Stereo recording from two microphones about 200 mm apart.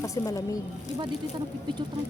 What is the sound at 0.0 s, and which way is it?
Speech, 15° left (ahead or behind).